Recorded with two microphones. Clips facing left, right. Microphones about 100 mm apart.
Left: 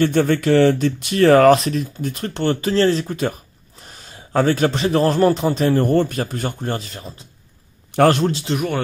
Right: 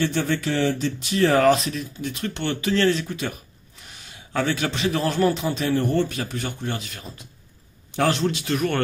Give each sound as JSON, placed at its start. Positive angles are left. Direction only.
{"t": 0.0, "sound": "speech", "side_deg": 55}
{"t": 1.0, "sound": "speech", "side_deg": 75}
{"t": 1.6, "sound": "a man's voice", "side_deg": 35}
{"t": 7.9, "sound": "speech", "side_deg": 55}
{"t": 8.3, "sound": "a man's voice", "side_deg": 35}
{"t": 8.5, "sound": "speech", "side_deg": 10}